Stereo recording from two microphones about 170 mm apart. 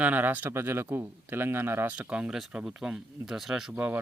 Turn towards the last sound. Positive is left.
turn(degrees=-10)  # may be behind; listen again after turning